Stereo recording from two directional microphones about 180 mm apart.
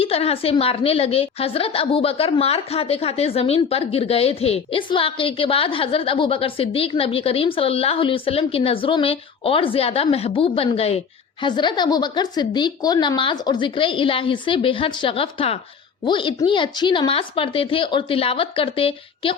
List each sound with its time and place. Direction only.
0.0 s a woman's voice: 35° left (ahead or behind)